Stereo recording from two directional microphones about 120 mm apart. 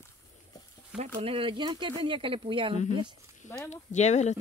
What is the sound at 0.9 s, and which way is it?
Speech, 60° right (ahead or behind).